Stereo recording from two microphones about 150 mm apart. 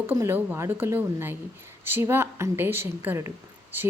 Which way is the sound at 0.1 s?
15° right (ahead or behind).